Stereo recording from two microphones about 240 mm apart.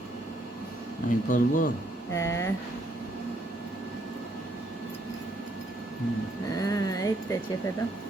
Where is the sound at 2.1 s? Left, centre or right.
Centre.